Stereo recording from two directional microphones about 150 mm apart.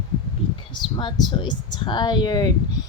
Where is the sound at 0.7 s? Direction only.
30° left (ahead or behind).